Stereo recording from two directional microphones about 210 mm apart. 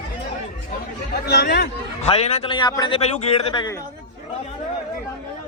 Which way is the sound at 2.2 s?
25° left (ahead or behind).